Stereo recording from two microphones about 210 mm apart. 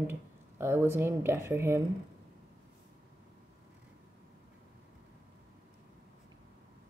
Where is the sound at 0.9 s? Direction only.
10° right (ahead or behind).